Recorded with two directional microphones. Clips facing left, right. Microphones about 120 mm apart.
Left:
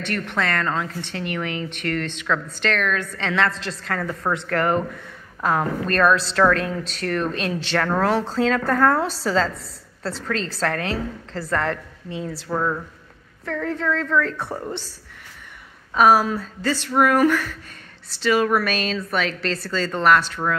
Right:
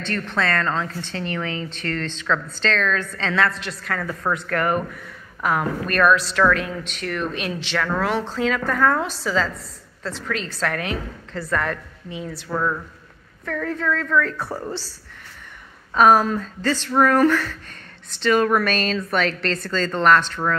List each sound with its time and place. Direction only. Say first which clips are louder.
0.3 s a woman's voice: right 2 dB; 15° left (ahead or behind)
15.9 s a woman's voice: right 1 dB; 5° left (ahead or behind)